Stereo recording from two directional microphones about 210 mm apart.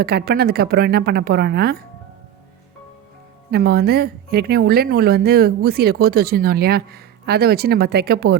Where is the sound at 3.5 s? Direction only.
50° right (ahead or behind).